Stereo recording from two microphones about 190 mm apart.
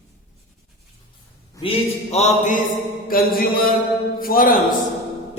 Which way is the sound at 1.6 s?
30° left (ahead or behind).